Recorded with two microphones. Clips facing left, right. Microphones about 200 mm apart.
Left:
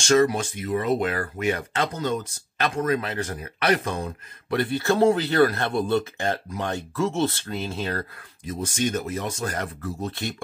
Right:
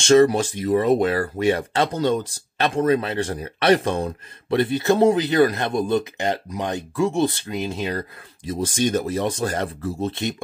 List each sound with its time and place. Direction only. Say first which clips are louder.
0.0 s speech: right 5 dB; 25° right (ahead or behind)
8.5 s speech: right 4 dB; 35° right (ahead or behind)